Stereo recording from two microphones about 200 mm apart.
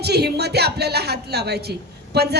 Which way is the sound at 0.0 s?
55° right (ahead or behind).